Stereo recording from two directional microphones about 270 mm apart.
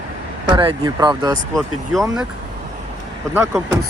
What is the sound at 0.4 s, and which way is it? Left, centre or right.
Speech, centre.